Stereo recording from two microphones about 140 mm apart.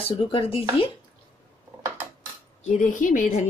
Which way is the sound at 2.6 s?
65° left (ahead or behind).